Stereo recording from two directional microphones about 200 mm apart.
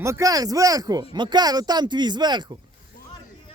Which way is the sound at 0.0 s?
15° right (ahead or behind).